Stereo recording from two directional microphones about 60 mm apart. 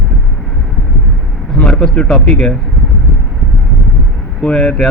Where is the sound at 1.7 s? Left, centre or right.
Centre.